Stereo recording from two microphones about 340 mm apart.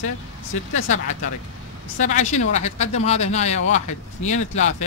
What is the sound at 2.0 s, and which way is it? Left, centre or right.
Speech, left.